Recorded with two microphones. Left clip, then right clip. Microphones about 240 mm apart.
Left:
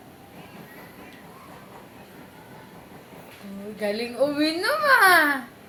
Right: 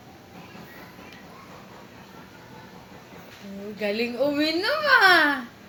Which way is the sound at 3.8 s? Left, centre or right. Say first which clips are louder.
Left 1 dB; right.